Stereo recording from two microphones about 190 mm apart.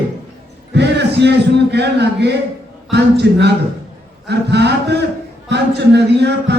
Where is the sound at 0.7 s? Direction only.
65° right (ahead or behind).